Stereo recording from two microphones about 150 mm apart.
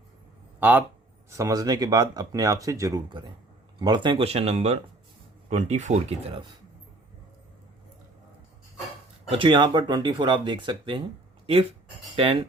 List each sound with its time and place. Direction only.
0.6 s speech: 10° right (ahead or behind)
1.3 s speech: 20° right (ahead or behind); by 6.5 s 40° right (ahead or behind)
9.3 s speech: 30° right (ahead or behind)
12.1 s speech: 35° right (ahead or behind)